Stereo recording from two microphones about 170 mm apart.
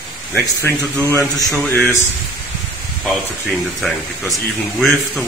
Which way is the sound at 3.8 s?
Centre (ahead or behind).